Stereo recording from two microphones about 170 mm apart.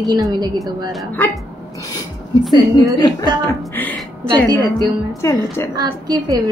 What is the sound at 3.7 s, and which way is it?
A woman's voice, 10° left (ahead or behind).